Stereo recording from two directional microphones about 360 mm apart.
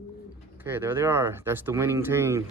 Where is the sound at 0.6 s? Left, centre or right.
Centre.